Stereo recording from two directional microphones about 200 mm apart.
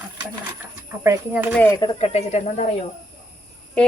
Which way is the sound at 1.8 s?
30° left (ahead or behind).